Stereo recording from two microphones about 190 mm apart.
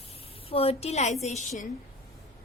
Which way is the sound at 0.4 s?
30° left (ahead or behind).